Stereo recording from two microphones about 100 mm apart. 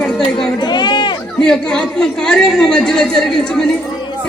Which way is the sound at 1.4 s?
5° left (ahead or behind).